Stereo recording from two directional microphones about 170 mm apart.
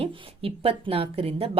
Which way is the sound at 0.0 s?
35° right (ahead or behind).